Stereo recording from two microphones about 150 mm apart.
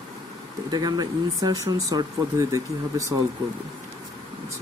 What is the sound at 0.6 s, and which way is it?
Speech, 25° right (ahead or behind).